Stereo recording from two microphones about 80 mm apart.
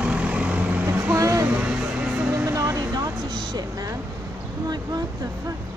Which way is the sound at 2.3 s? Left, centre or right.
Right.